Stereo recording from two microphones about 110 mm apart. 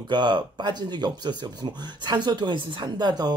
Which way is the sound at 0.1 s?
45° right (ahead or behind).